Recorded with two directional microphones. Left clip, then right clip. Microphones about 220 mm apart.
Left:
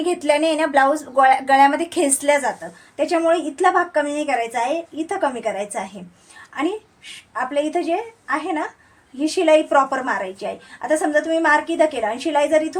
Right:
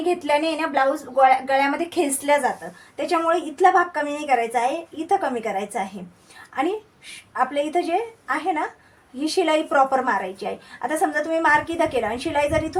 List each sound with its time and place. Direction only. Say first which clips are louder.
0.0 s a woman's voice: left 3 dB; 30° left (ahead or behind)
7.3 s a woman's voice: even; 20° left (ahead or behind)